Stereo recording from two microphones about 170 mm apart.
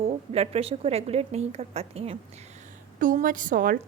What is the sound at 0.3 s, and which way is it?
A woman's voice, 35° right (ahead or behind).